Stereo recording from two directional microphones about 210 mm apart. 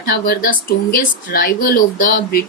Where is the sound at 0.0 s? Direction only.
45° left (ahead or behind).